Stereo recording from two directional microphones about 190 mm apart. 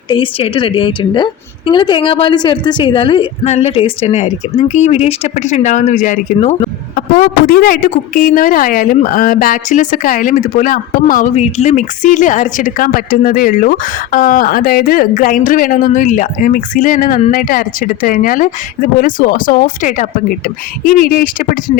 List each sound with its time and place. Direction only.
0.1 s a woman's voice: 25° left (ahead or behind)
6.9 s a woman's voice: 50° left (ahead or behind)